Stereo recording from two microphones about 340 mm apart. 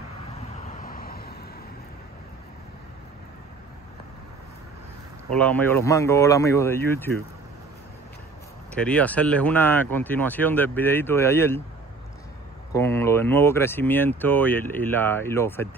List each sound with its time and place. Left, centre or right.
0.7 s vehicle: left
5.3 s speech: centre
8.8 s speech: centre
12.7 s speech: centre